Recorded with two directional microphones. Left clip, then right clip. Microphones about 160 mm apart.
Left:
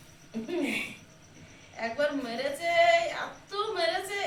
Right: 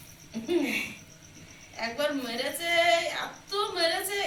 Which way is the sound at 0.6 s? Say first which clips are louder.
Right 1 dB; 5° right (ahead or behind).